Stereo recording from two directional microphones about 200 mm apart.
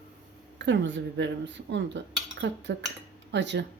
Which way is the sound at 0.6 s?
60° right (ahead or behind).